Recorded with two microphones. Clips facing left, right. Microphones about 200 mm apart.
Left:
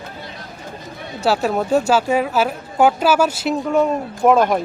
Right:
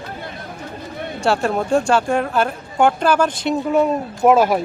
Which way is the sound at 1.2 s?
5° left (ahead or behind).